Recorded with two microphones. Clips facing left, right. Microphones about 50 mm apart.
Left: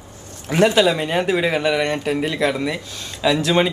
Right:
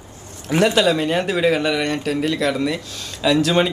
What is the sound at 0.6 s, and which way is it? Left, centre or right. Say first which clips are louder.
Speech: left 1 dB; centre.